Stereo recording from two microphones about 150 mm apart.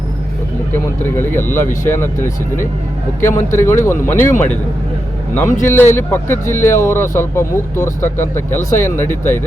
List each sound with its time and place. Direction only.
1.0 s speech: 15° left (ahead or behind)